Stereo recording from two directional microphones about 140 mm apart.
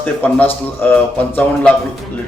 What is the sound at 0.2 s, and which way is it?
Speech, 10° left (ahead or behind).